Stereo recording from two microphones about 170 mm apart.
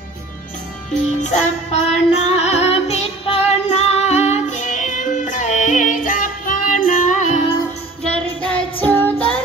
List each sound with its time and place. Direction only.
1.0 s music: 40° left (ahead or behind)
8.0 s music: 5° left (ahead or behind)